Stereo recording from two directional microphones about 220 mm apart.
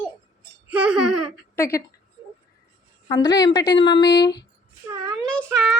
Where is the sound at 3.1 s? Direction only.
15° left (ahead or behind).